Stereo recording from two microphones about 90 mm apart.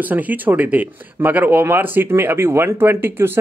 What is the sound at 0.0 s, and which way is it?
Speech, 20° right (ahead or behind).